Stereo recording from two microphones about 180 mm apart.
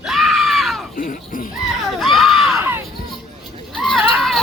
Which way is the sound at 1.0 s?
50° left (ahead or behind).